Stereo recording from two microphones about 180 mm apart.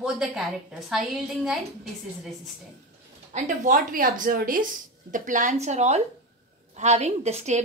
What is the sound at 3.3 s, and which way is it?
A woman's voice, 45° right (ahead or behind).